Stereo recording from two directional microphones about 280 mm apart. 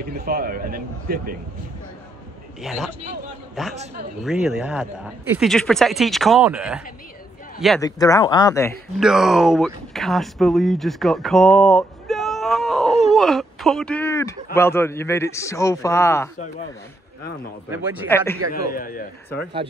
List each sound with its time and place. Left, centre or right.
0.0 s a man's voice: right
2.6 s speech: centre
4.2 s speech: centre
7.8 s speech: centre
9.0 s speech: centre
17.6 s a man's voice: centre
18.0 s speech: centre
18.5 s a man's voice: left